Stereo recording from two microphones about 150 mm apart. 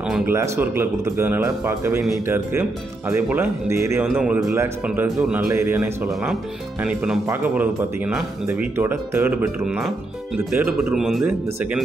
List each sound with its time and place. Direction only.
0.3 s speech: 15° right (ahead or behind)
9.7 s speech: 5° right (ahead or behind)